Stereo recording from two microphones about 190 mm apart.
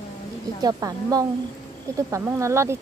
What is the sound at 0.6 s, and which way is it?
A woman's voice, 20° right (ahead or behind).